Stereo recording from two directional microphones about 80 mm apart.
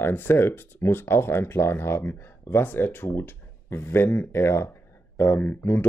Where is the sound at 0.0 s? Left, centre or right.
Left.